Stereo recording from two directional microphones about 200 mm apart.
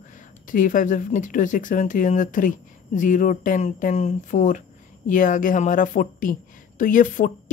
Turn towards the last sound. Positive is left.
turn(degrees=40)  # may be behind; listen again after turning